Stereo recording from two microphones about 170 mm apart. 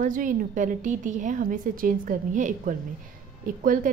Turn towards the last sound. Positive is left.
turn(degrees=-55)  # may be behind; listen again after turning